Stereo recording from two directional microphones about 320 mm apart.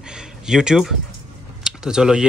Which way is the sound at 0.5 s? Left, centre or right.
Centre.